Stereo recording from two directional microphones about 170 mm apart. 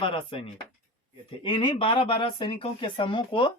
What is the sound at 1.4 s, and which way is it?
Speech, 25° left (ahead or behind).